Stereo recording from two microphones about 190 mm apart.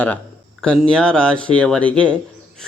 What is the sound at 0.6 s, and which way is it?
A man's voice, 5° left (ahead or behind).